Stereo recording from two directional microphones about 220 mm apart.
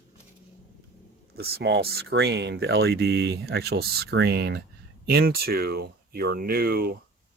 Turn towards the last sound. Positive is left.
turn(degrees=-45)  # may be behind; listen again after turning